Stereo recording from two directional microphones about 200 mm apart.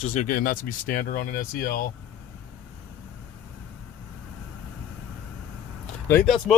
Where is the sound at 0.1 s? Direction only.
40° left (ahead or behind).